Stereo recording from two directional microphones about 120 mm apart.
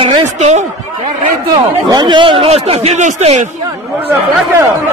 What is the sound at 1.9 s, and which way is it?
Speech, 40° right (ahead or behind).